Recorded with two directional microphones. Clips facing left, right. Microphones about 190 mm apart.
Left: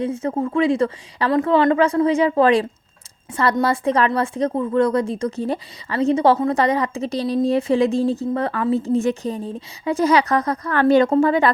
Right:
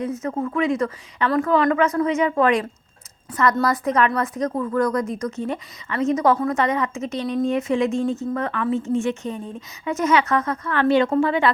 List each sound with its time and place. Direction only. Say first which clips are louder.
0.0 s a woman's voice: left 3 dB; 30° left (ahead or behind)